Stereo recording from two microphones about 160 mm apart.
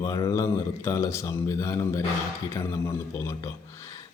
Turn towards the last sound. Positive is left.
turn(degrees=20)  # may be behind; listen again after turning